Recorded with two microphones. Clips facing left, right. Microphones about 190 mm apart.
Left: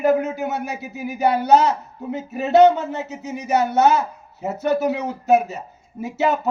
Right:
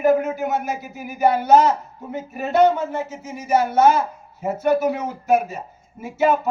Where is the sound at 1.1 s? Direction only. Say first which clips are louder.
Even; 70° left (ahead or behind).